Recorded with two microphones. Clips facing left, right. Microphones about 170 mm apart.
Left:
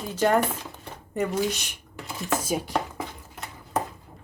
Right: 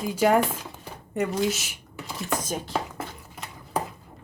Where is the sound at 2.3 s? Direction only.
10° left (ahead or behind).